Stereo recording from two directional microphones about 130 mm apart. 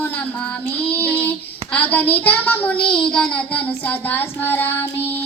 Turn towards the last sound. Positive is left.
turn(degrees=15)  # may be behind; listen again after turning